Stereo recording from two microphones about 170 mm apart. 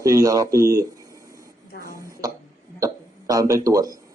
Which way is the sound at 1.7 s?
60° left (ahead or behind).